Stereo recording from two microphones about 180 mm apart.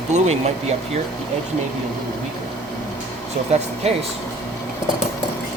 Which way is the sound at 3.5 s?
35° right (ahead or behind).